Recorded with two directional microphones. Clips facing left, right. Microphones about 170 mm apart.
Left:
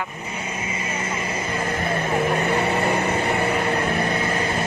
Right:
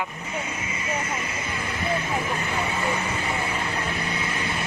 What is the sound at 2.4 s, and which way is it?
Vehicle, 60° left (ahead or behind).